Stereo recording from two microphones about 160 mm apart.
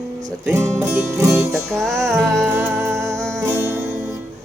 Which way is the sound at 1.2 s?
15° right (ahead or behind).